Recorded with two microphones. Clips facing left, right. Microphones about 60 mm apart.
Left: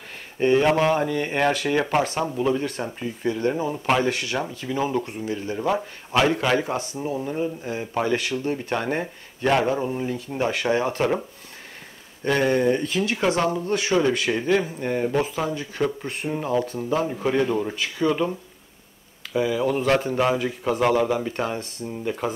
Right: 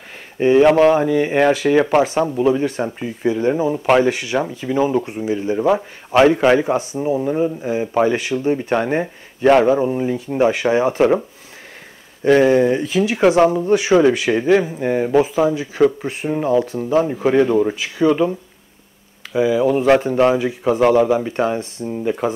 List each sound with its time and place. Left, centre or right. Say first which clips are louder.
0.4 s speech: right 7 dB; centre
3.0 s speech: right 4 dB; right
12.2 s speech: right 8 dB; centre
17.1 s speech: right 7 dB; centre
19.3 s speech: right 7 dB; centre